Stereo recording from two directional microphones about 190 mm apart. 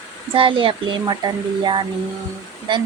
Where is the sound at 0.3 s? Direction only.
25° right (ahead or behind).